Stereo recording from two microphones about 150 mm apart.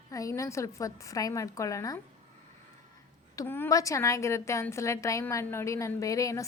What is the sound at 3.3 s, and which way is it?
A woman's voice, 15° left (ahead or behind).